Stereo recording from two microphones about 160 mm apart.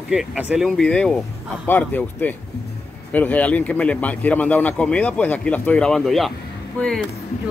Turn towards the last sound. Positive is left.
turn(degrees=0)  # may be behind; listen again after turning